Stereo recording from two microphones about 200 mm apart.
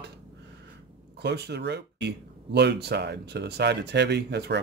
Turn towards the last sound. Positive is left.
turn(degrees=-55)  # may be behind; listen again after turning